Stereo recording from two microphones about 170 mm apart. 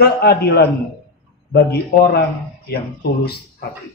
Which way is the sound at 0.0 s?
70° left (ahead or behind).